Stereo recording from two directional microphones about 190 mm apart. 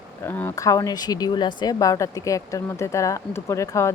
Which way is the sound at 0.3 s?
10° left (ahead or behind).